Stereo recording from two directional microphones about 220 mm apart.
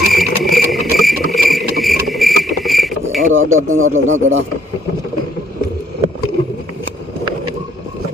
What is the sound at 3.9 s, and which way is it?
Speech, 35° right (ahead or behind).